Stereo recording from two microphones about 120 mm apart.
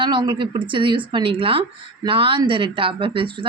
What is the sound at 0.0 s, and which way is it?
A woman's voice, 40° right (ahead or behind).